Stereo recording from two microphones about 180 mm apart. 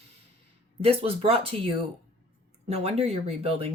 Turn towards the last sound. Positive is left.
turn(degrees=-35)  # may be behind; listen again after turning